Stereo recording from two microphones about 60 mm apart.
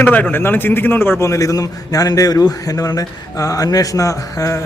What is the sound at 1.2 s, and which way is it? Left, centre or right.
A man's voice, left.